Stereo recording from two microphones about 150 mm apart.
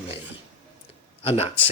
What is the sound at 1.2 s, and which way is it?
Speech, 45° left (ahead or behind).